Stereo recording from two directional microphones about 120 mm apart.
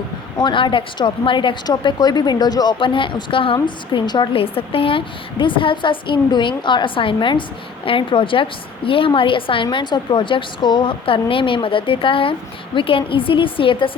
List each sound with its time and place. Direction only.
0.3 s a woman's voice: 40° left (ahead or behind)